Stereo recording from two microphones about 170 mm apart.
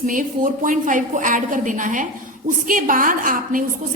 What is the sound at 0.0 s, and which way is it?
A woman's voice, 50° right (ahead or behind).